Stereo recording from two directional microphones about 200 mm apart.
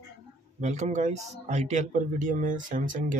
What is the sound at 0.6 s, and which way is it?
A man's voice, 35° right (ahead or behind).